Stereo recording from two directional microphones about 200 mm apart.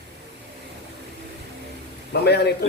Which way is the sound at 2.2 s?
55° left (ahead or behind).